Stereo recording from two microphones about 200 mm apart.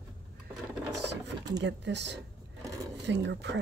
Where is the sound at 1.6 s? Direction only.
60° right (ahead or behind).